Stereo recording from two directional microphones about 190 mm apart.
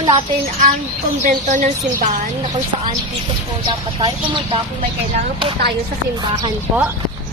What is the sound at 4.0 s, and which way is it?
Speech, 25° right (ahead or behind).